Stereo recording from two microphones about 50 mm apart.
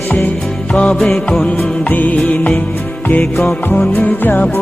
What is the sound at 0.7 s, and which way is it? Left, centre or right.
Music, left.